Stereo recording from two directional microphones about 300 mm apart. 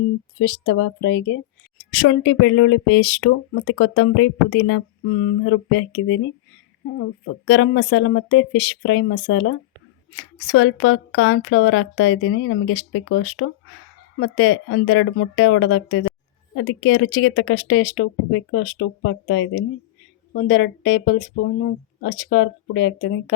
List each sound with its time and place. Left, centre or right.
0.3 s speech: left
7.4 s speech: left